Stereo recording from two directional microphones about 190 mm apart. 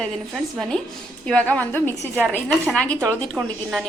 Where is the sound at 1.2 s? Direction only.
5° left (ahead or behind).